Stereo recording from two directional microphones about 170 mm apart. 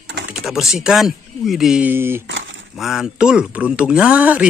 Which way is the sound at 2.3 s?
90° right.